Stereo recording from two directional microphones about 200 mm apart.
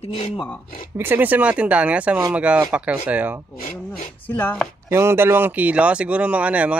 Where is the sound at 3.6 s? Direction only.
40° left (ahead or behind).